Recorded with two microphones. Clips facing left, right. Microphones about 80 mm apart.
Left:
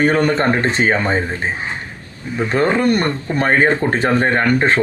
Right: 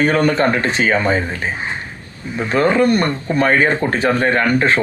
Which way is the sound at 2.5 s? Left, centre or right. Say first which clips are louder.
Right 2 dB; left.